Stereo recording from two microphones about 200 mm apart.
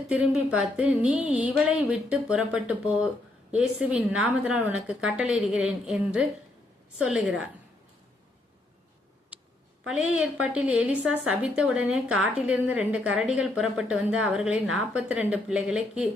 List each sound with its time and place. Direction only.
0.1 s a woman's voice: 5° right (ahead or behind)
9.3 s a sound: 5° right (ahead or behind)
9.8 s a woman's voice: 5° right (ahead or behind)